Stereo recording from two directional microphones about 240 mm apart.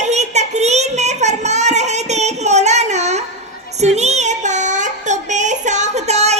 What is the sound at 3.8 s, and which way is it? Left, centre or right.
Child singing, right.